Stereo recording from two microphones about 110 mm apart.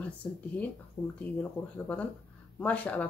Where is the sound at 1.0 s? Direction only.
35° left (ahead or behind).